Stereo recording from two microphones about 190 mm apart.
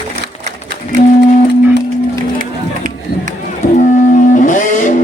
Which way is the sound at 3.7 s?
40° left (ahead or behind).